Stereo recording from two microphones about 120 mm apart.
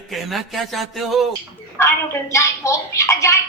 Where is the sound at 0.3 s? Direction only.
Centre (ahead or behind).